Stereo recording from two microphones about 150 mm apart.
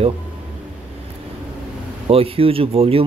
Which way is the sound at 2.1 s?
40° right (ahead or behind).